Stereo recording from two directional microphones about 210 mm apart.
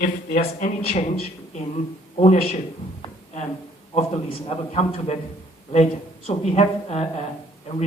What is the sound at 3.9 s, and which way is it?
A man's voice, 30° left (ahead or behind).